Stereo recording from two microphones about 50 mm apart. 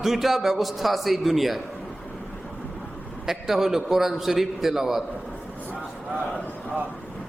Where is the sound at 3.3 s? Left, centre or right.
Centre.